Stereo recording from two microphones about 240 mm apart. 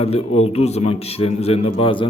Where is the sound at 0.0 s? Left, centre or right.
Left.